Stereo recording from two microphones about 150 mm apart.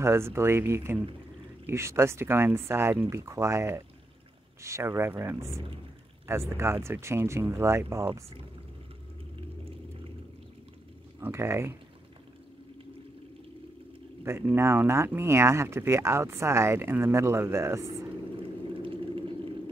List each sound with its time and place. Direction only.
0.0 s speech: 15° right (ahead or behind)
6.5 s speech: 15° right (ahead or behind)
11.1 s speech: 15° right (ahead or behind)
14.2 s speech: 15° right (ahead or behind)
18.8 s vehicle: 35° right (ahead or behind)